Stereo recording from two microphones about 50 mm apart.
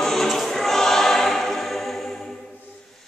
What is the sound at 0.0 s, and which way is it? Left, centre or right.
Choir, centre.